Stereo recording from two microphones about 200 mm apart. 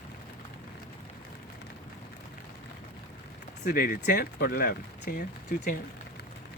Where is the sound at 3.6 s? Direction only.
45° left (ahead or behind).